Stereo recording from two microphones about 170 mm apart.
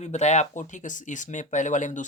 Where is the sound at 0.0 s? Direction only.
40° left (ahead or behind).